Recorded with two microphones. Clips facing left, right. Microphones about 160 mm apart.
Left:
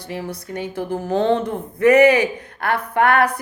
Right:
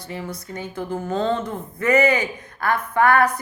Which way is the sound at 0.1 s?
70° left (ahead or behind).